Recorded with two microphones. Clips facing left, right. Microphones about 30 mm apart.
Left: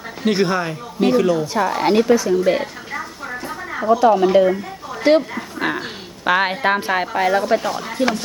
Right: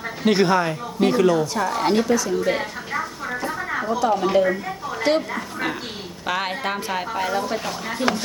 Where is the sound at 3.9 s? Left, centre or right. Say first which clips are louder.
Left 8 dB; centre.